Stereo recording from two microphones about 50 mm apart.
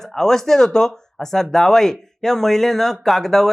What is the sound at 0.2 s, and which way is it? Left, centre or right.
Speech, centre.